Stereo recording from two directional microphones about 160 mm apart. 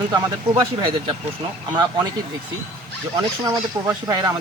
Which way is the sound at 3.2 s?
25° right (ahead or behind).